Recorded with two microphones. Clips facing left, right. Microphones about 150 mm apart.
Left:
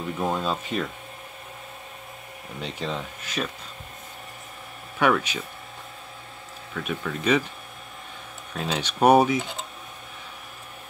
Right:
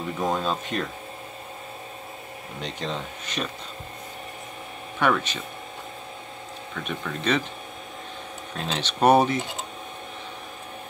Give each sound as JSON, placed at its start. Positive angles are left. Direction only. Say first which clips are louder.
{"t": 0.2, "sound": "speech", "louder": "right 1 dB", "side_deg": 5}
{"t": 2.6, "sound": "speech", "louder": "left 1 dB", "side_deg": 5}
{"t": 4.9, "sound": "speech", "louder": "left 1 dB", "side_deg": 5}
{"t": 6.7, "sound": "speech", "louder": "left 2 dB", "side_deg": 5}
{"t": 8.5, "sound": "speech", "louder": "left 1 dB", "side_deg": 5}